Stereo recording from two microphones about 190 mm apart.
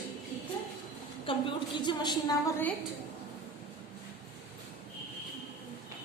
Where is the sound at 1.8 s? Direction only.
25° left (ahead or behind).